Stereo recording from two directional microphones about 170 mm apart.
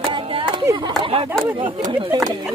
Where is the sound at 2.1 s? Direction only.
25° right (ahead or behind).